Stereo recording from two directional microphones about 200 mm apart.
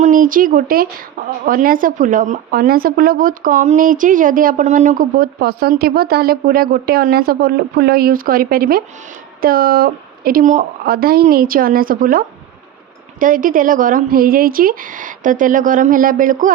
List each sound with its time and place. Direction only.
0.0 s speech: 40° right (ahead or behind)